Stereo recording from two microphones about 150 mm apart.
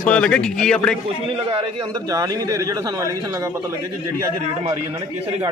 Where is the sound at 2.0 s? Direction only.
25° right (ahead or behind).